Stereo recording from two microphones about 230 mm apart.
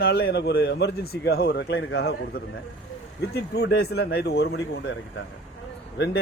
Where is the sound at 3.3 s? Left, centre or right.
Left.